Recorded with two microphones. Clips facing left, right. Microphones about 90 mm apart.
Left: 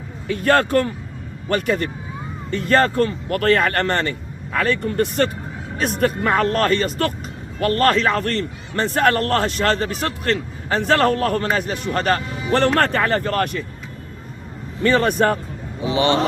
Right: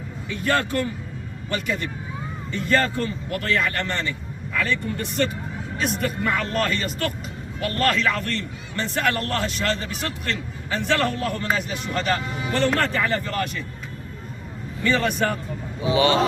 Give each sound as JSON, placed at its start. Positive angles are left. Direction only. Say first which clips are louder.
{"t": 0.3, "sound": "a man's voice", "louder": "left 6 dB", "side_deg": 50}
{"t": 14.8, "sound": "a man's voice", "louder": "left 5 dB", "side_deg": 45}
{"t": 16.0, "sound": "speech", "louder": "left 1 dB", "side_deg": 30}